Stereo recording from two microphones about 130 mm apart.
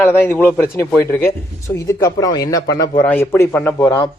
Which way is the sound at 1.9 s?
30° left (ahead or behind).